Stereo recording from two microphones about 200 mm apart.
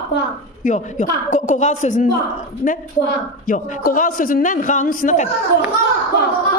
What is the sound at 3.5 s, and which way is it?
A man's voice, 45° left (ahead or behind).